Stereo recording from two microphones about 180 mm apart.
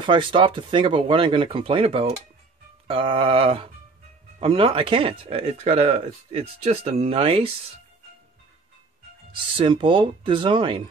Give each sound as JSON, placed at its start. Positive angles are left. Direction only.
{"t": 0.0, "sound": "speech", "side_deg": -25}
{"t": 9.3, "sound": "speech", "side_deg": -30}